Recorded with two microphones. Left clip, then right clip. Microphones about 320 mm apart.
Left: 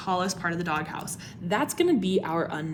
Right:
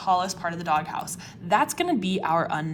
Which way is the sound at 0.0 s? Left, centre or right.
Centre.